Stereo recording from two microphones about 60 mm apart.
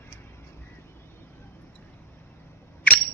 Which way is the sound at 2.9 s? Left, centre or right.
Left.